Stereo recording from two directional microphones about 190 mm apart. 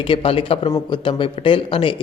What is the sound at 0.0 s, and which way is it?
Speech, 30° left (ahead or behind).